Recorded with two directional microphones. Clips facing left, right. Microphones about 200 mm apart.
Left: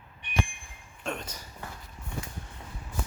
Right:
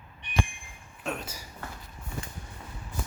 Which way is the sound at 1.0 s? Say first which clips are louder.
Right 1 dB; 5° right (ahead or behind).